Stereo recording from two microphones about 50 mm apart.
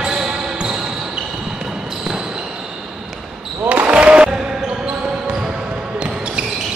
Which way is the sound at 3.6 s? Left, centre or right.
Right.